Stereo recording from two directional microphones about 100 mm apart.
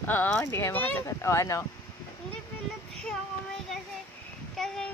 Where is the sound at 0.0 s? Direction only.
20° left (ahead or behind).